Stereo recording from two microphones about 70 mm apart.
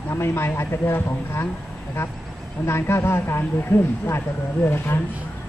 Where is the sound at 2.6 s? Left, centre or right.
Left.